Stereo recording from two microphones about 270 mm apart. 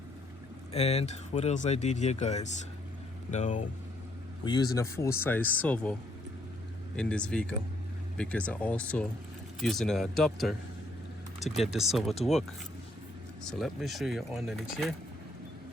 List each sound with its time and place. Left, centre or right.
0.7 s speech: left
4.4 s speech: centre
13.6 s speech: centre